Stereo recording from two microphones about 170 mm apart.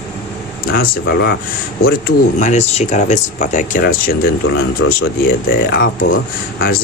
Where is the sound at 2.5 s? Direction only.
40° left (ahead or behind).